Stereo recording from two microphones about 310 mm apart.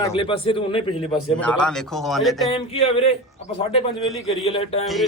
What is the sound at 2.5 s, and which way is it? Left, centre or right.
Speech, centre.